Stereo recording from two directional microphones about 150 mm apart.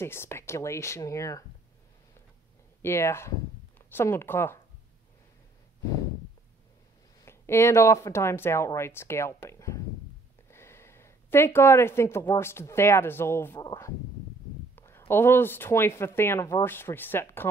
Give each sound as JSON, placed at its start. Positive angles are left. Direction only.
{"t": 0.0, "sound": "speech", "side_deg": 15}
{"t": 2.8, "sound": "speech", "side_deg": 15}
{"t": 7.2, "sound": "a woman's voice", "side_deg": 15}